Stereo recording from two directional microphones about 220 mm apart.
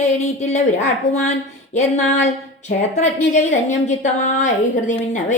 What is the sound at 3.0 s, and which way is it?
A woman's voice, 30° left (ahead or behind).